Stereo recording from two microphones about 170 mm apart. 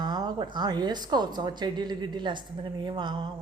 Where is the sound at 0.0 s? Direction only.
25° right (ahead or behind).